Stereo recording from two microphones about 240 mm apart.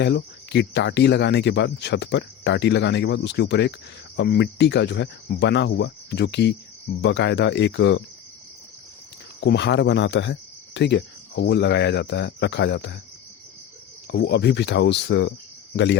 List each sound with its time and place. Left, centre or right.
0.0 s speech: left
9.4 s speech: left
14.1 s speech: left